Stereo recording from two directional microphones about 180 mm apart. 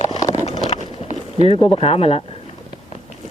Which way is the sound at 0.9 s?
35° left (ahead or behind).